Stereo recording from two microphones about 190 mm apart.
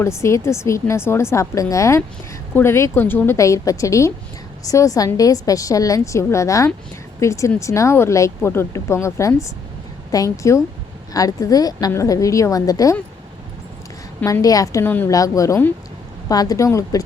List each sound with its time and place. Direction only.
0.0 s speech: 15° left (ahead or behind)
14.2 s speech: 15° left (ahead or behind)